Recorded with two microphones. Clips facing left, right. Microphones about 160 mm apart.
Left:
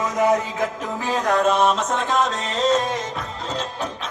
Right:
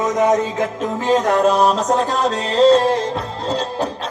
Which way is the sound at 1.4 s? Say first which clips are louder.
Right 4 dB; 35° right (ahead or behind).